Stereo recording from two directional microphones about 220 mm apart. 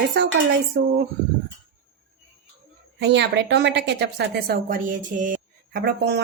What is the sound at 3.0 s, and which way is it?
A woman's voice, 50° right (ahead or behind).